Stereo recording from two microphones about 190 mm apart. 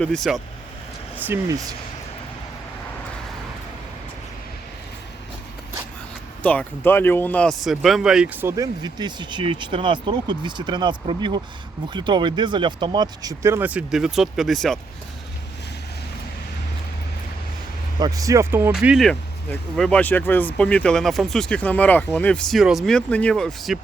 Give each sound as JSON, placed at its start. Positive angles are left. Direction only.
{"t": 0.0, "sound": "speech", "side_deg": 5}
{"t": 6.4, "sound": "speech", "side_deg": 5}
{"t": 18.0, "sound": "speech", "side_deg": -20}